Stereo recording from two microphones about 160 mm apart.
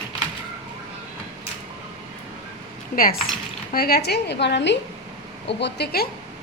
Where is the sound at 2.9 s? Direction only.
65° left (ahead or behind); by 6.1 s 85° left.